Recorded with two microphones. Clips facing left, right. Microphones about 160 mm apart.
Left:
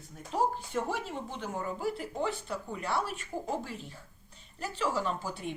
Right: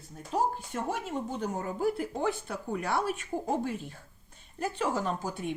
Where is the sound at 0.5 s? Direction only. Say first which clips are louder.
Even; 50° right (ahead or behind).